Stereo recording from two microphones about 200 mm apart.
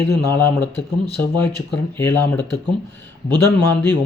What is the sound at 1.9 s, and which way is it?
Speech, 10° left (ahead or behind).